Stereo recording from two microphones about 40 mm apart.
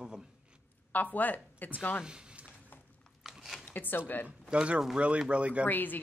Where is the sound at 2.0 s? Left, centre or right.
Right.